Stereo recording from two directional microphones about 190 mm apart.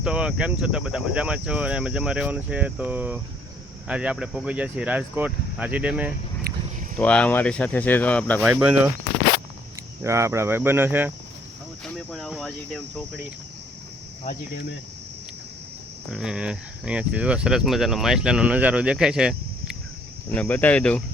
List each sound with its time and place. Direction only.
0.0 s speech: 5° right (ahead or behind)
6.5 s a sound: 55° right (ahead or behind)
7.0 s speech: 5° left (ahead or behind)
8.4 s speech: 5° right (ahead or behind)
10.0 s speech: 15° right (ahead or behind)
12.1 s speech: centre (ahead or behind)
16.1 s speech: 5° right (ahead or behind)
20.3 s speech: 10° left (ahead or behind)